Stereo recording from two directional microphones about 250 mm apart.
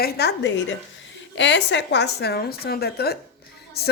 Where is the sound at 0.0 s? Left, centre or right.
Left.